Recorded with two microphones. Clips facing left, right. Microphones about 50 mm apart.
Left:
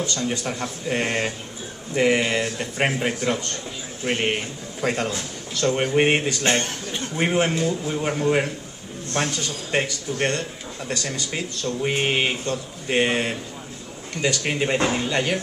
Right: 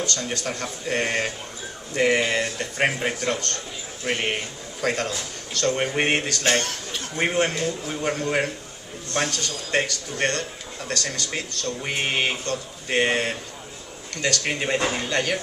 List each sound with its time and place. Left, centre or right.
0.0 s a man's voice: centre
9.3 s a man's voice: centre
9.8 s a man's voice: centre